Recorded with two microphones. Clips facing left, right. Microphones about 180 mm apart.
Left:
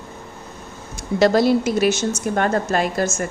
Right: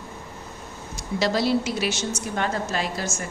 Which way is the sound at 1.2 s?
50° left (ahead or behind).